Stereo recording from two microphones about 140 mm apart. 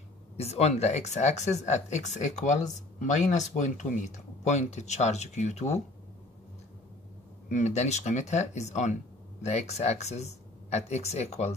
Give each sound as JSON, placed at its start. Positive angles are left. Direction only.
{"t": 0.4, "sound": "speech", "side_deg": 50}
{"t": 7.4, "sound": "speech", "side_deg": 55}